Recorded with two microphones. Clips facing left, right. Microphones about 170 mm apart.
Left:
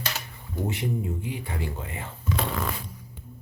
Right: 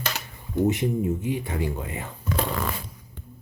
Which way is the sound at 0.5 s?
20° right (ahead or behind).